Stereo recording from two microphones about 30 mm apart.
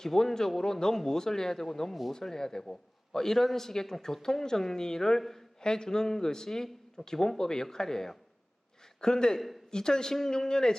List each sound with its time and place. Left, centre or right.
0.0 s a man's voice: centre
1.9 s speech: centre
2.1 s a man's voice: centre